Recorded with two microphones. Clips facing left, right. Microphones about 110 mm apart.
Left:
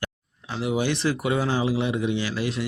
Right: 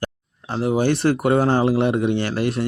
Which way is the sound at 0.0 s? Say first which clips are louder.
Right 5 dB; 45° right (ahead or behind).